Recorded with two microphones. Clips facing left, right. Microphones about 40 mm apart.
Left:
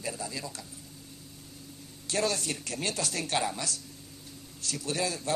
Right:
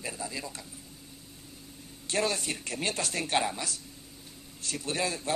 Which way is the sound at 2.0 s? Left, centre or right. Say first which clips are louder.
Even; right.